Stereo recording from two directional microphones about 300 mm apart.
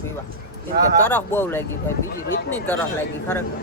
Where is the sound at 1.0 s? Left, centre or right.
Centre.